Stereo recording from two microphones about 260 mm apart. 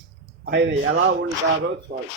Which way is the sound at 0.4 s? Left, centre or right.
Right.